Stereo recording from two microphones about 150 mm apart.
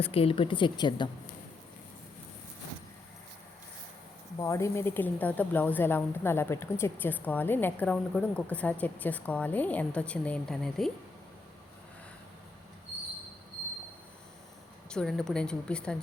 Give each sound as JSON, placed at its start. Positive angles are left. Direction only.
{"t": 0.0, "sound": "a woman's voice", "side_deg": 40}
{"t": 4.4, "sound": "a woman's voice", "side_deg": 20}
{"t": 14.8, "sound": "a woman's voice", "side_deg": 5}